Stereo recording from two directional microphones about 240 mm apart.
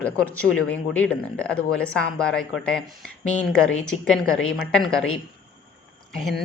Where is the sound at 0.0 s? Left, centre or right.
Centre.